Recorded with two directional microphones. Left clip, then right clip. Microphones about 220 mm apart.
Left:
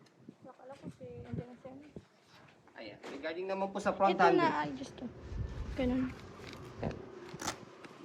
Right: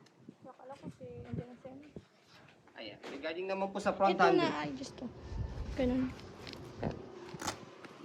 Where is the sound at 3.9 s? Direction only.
15° right (ahead or behind).